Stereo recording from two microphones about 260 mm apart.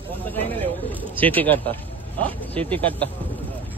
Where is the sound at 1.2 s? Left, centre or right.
Centre.